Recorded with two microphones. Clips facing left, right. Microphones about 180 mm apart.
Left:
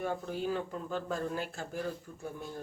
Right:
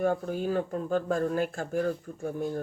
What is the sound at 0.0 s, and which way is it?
Speech, 50° right (ahead or behind).